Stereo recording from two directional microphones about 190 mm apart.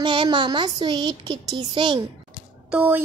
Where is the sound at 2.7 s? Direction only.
10° right (ahead or behind).